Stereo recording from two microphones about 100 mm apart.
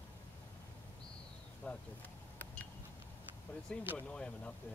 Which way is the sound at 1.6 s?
10° left (ahead or behind).